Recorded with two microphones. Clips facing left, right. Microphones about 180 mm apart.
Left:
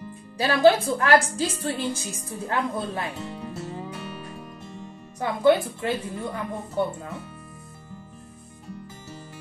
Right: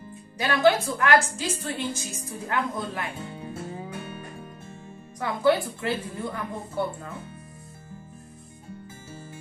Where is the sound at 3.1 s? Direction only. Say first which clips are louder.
Left 2 dB; 75° left (ahead or behind).